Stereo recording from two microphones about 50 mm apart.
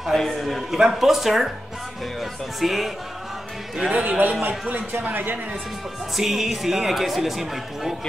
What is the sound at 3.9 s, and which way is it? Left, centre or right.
Speech, right.